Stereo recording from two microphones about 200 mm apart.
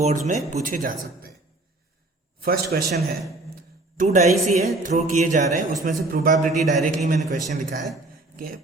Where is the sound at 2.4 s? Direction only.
50° right (ahead or behind).